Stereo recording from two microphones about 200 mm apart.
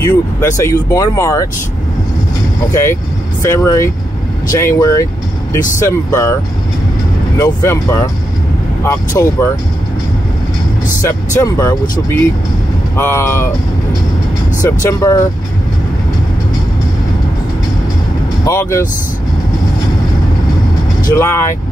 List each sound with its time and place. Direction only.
0.7 s speech: 15° left (ahead or behind)
2.7 s speech: 15° left (ahead or behind)
7.3 s speech: 15° left (ahead or behind)
11.0 s speech: 15° left (ahead or behind)
12.9 s speech: 10° left (ahead or behind)
14.6 s speech: 15° left (ahead or behind)
18.4 s speech: 15° left (ahead or behind)
21.1 s speech: 15° left (ahead or behind)